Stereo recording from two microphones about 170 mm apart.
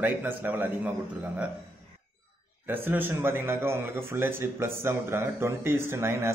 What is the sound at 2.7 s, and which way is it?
A man's voice, 10° right (ahead or behind).